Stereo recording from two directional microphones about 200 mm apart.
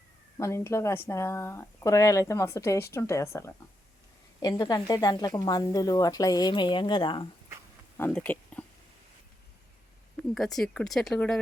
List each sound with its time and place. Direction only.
0.3 s speech: 15° left (ahead or behind)
7.9 s a sound: 10° left (ahead or behind)
10.3 s speech: centre (ahead or behind)